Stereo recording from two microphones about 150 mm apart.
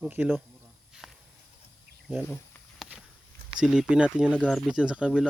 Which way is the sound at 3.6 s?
5° right (ahead or behind).